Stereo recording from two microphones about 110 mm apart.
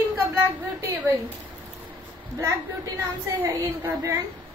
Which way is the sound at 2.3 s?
25° right (ahead or behind).